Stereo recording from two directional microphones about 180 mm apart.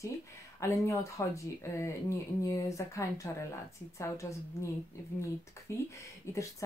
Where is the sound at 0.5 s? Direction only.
15° left (ahead or behind).